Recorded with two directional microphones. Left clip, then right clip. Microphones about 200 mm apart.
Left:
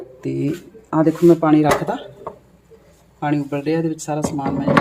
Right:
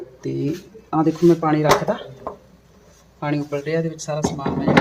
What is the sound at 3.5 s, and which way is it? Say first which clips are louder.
Speech: left 2 dB; 30° left (ahead or behind).